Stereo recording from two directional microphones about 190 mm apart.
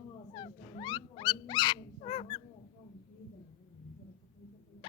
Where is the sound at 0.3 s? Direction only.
25° left (ahead or behind).